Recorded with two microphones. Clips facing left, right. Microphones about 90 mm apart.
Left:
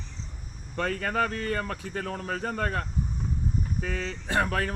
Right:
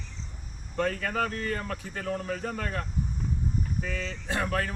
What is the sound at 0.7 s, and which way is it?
Speech, 50° left (ahead or behind).